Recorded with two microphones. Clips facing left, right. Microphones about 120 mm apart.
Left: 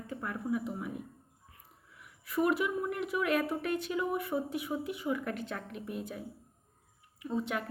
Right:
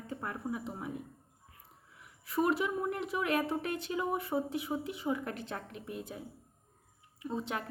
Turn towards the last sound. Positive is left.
turn(degrees=-30)  # may be behind; listen again after turning